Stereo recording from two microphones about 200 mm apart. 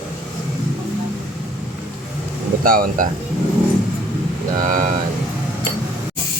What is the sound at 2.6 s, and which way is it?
Speech, 45° right (ahead or behind).